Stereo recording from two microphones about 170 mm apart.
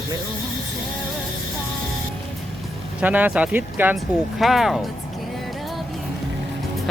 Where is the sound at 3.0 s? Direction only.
10° right (ahead or behind).